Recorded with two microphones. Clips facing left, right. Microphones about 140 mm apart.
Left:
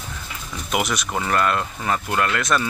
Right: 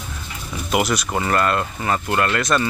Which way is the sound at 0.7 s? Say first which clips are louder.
Right 3 dB; centre (ahead or behind).